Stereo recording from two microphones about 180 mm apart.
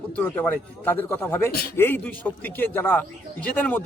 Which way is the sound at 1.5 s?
60° left (ahead or behind).